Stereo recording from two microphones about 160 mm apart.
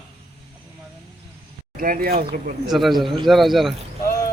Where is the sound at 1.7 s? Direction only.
60° right (ahead or behind).